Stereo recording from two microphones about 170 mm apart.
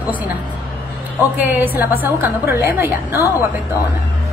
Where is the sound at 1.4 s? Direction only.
10° right (ahead or behind).